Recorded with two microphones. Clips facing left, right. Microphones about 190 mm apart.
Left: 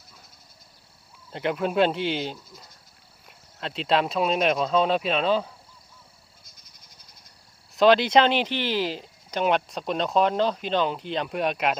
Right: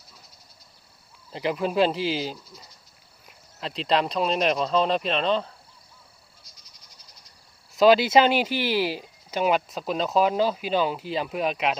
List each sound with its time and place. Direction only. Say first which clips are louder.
1.3 s speech: even; centre (ahead or behind)
6.4 s frog: even; 50° left (ahead or behind)
7.7 s speech: right 1 dB; 5° right (ahead or behind)